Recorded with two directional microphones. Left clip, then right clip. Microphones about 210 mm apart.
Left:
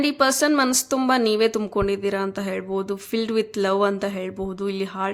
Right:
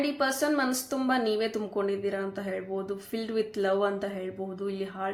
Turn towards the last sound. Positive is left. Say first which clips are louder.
# left 7 dB
turn(degrees=40)  # may be behind; listen again after turning